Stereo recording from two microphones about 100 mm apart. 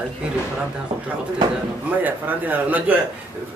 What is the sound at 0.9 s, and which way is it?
Speech, 50° right (ahead or behind).